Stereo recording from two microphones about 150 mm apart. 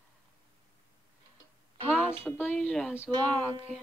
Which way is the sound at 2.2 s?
15° left (ahead or behind).